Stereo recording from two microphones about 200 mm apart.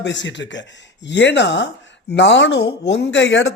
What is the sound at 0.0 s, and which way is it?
Speech, 65° left (ahead or behind).